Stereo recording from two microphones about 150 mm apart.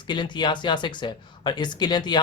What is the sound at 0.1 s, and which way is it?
Speech, 30° left (ahead or behind).